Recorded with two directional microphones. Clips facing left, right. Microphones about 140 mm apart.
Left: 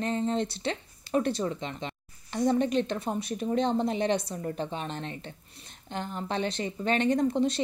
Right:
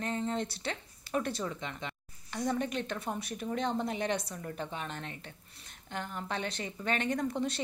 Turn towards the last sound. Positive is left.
turn(degrees=25)  # may be behind; listen again after turning